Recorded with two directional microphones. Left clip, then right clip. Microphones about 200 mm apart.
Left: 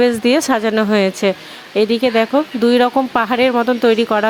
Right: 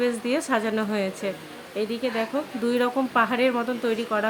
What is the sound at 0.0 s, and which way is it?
Speech, 45° left (ahead or behind).